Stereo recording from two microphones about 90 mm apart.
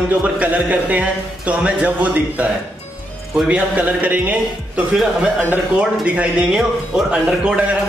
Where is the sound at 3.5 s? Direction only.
15° right (ahead or behind).